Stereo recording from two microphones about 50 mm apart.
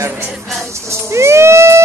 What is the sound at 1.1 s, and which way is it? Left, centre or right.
Music, right.